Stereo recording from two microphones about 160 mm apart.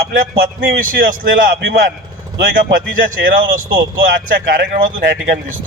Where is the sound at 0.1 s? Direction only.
70° right (ahead or behind).